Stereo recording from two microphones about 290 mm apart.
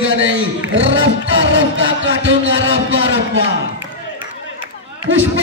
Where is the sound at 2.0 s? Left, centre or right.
Right.